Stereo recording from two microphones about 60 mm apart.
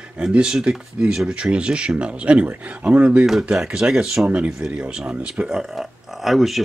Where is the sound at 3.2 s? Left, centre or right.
Centre.